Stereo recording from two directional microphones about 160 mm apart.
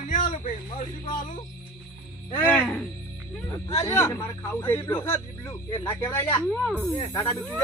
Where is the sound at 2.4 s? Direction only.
10° left (ahead or behind).